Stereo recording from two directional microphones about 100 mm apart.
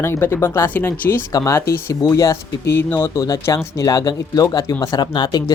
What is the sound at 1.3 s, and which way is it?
Speech, 40° left (ahead or behind).